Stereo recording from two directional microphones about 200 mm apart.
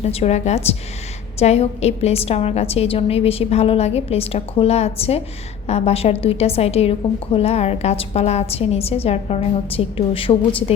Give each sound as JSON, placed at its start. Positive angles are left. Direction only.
{"t": 0.0, "sound": "a woman's voice", "side_deg": 30}